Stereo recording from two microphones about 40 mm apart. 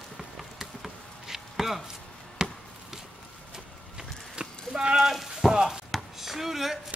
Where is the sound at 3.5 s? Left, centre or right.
Centre.